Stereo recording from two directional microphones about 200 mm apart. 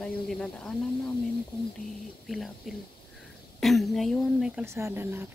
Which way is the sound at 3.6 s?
Centre (ahead or behind).